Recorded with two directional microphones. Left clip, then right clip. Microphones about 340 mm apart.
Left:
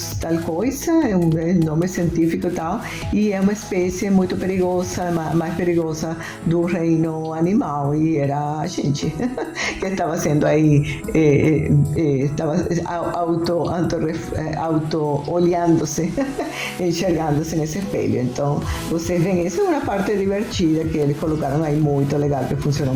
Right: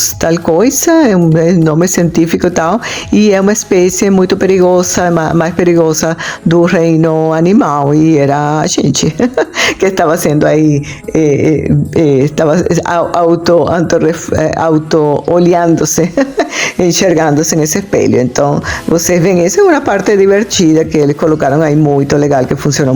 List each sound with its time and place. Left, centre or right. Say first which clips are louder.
0.3 s speech: right 12 dB; right